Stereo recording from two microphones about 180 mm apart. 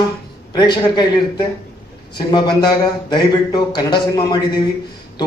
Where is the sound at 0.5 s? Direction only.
25° left (ahead or behind).